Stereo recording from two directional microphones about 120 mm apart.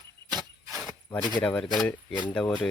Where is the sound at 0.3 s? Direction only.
35° right (ahead or behind).